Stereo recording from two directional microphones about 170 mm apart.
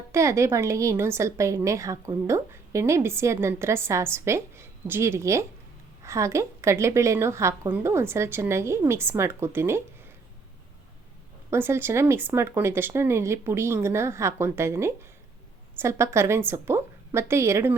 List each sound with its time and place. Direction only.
0.1 s a woman's voice: 15° right (ahead or behind)
11.5 s a woman's voice: 15° right (ahead or behind)